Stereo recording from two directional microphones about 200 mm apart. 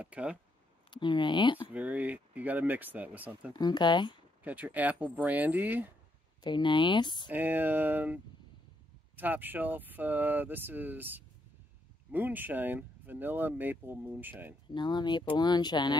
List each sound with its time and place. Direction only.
0.0 s speech: 5° right (ahead or behind)
0.8 s speech: 25° left (ahead or behind)
1.7 s speech: 5° right (ahead or behind)
3.5 s speech: 20° left (ahead or behind)
4.4 s speech: 10° right (ahead or behind)
6.4 s speech: 25° left (ahead or behind)
7.2 s speech: 10° right (ahead or behind)
14.7 s speech: 20° left (ahead or behind)